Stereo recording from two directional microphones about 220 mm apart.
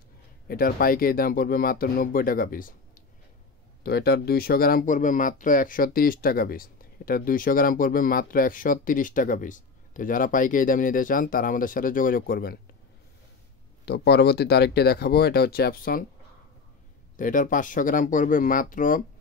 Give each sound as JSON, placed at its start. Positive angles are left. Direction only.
{"t": 0.5, "sound": "speech", "side_deg": 40}
{"t": 13.8, "sound": "speech", "side_deg": 45}
{"t": 17.2, "sound": "speech", "side_deg": 35}